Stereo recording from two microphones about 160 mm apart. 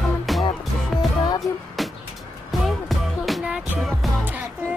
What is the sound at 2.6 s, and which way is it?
Music, centre (ahead or behind).